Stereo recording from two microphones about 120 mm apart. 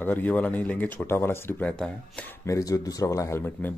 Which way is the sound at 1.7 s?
5° left (ahead or behind).